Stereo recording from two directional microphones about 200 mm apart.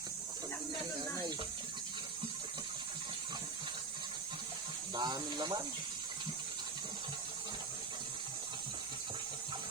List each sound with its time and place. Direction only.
4.9 s speech: 20° right (ahead or behind)